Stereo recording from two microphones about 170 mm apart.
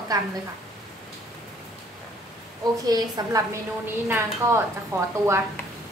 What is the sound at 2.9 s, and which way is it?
A woman's voice, 20° right (ahead or behind).